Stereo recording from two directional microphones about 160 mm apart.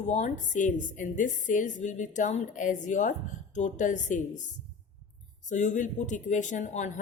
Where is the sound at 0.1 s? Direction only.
50° left (ahead or behind).